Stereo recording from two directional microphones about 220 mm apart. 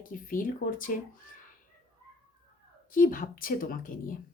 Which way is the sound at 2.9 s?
40° left (ahead or behind).